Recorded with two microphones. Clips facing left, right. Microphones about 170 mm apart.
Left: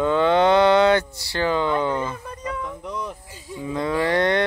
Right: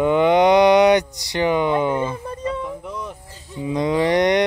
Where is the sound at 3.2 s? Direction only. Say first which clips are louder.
Left 2 dB; 10° left (ahead or behind).